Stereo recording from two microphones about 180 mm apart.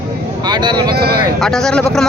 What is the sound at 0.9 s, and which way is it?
Speech, 60° right (ahead or behind).